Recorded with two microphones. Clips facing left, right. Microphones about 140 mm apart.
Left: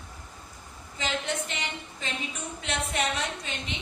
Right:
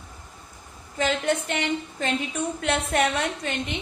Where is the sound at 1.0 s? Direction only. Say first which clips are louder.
Right 7 dB; 55° right (ahead or behind).